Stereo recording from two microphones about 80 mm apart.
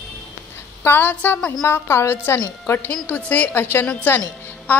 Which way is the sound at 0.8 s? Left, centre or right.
Left.